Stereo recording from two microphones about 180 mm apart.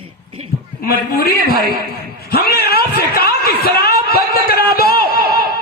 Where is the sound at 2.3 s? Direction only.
60° left (ahead or behind).